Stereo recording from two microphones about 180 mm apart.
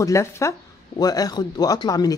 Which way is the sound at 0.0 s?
15° left (ahead or behind).